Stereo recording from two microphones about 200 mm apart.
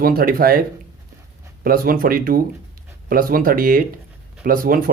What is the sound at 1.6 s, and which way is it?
Speech, 45° right (ahead or behind).